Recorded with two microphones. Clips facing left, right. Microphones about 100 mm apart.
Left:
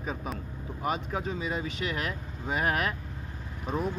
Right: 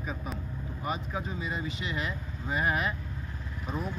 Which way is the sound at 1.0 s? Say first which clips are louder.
Left 3 dB; 70° left (ahead or behind).